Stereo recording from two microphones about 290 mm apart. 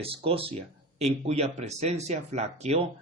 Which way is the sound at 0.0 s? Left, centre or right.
Centre.